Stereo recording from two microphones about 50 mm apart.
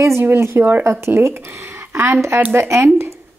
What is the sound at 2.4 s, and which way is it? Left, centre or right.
Speech, right.